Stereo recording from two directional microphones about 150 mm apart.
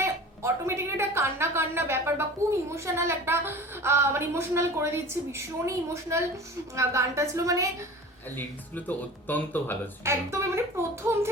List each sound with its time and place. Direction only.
0.0 s a woman's voice: 15° right (ahead or behind)
8.4 s speech: 10° left (ahead or behind)
10.0 s a woman's voice: 15° right (ahead or behind)